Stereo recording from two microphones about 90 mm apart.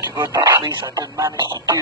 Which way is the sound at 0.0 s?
35° right (ahead or behind).